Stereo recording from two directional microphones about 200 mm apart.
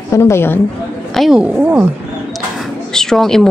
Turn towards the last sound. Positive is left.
turn(degrees=0)  # may be behind; listen again after turning